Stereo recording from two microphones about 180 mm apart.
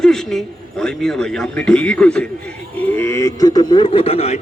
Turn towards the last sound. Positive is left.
turn(degrees=35)  # may be behind; listen again after turning